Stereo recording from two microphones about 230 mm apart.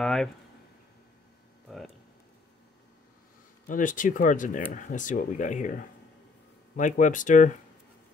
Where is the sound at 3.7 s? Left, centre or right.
Left.